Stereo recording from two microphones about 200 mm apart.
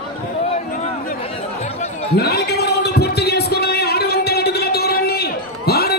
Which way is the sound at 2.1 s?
50° left (ahead or behind).